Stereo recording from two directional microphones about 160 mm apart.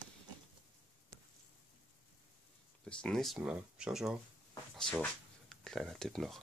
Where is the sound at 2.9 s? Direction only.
5° left (ahead or behind).